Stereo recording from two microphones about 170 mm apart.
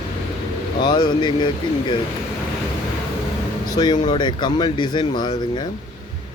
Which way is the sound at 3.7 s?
25° left (ahead or behind).